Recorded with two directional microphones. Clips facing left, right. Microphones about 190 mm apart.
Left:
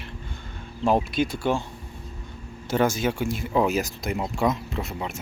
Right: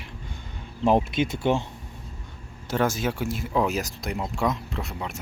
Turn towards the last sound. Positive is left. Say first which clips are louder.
# left 2 dB
turn(degrees=0)  # may be behind; listen again after turning